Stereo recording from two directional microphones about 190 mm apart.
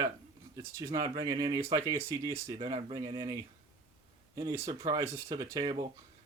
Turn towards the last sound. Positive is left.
turn(degrees=-20)  # may be behind; listen again after turning